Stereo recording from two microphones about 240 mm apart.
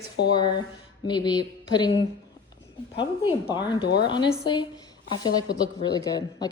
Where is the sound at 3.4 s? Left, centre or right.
Centre.